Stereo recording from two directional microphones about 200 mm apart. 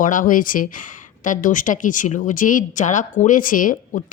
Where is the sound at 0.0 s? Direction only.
40° left (ahead or behind).